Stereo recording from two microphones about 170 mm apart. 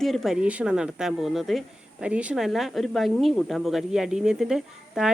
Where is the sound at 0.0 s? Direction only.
Centre (ahead or behind).